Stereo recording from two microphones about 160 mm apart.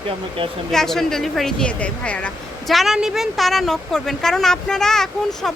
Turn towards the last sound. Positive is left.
turn(degrees=5)  # may be behind; listen again after turning